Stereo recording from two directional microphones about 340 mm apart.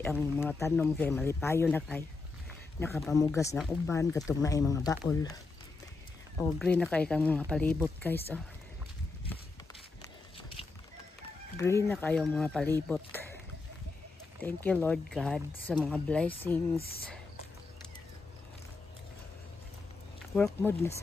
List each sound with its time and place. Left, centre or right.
0.0 s speech: centre
6.3 s speech: centre
11.5 s speech: centre
14.4 s speech: centre
16.7 s speech: left
20.3 s speech: centre